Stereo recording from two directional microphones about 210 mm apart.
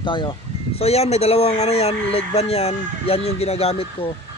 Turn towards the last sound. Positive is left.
turn(degrees=30)  # may be behind; listen again after turning